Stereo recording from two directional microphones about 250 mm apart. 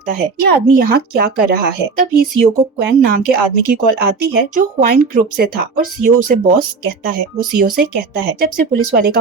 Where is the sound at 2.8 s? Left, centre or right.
Right.